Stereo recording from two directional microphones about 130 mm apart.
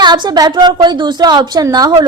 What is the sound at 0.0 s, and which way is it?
A woman's voice, 35° right (ahead or behind).